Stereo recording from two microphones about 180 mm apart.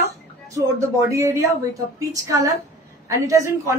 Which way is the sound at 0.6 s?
15° right (ahead or behind).